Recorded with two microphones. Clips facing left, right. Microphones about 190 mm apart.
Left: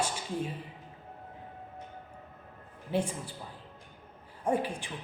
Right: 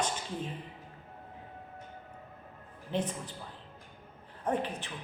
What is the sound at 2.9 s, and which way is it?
Speech, 10° left (ahead or behind).